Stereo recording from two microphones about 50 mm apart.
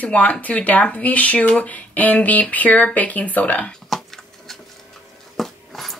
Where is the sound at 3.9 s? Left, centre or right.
Centre.